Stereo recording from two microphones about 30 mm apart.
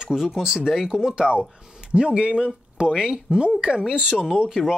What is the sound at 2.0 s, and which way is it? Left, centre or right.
Speech, right.